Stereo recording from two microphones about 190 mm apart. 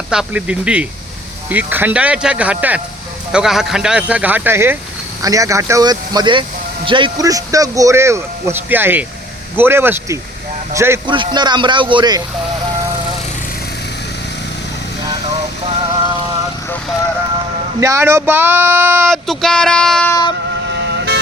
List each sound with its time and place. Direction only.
0.1 s speech: 5° right (ahead or behind)
11.0 s speech: 25° right (ahead or behind)
17.7 s speech: 15° right (ahead or behind)
19.1 s a sound: centre (ahead or behind)
20.7 s vehicle: 60° right (ahead or behind)